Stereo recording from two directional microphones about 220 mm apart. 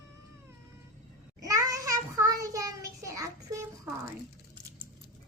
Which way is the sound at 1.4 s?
15° right (ahead or behind).